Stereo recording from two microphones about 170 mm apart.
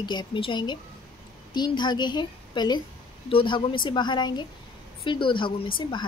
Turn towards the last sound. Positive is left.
turn(degrees=30)  # may be behind; listen again after turning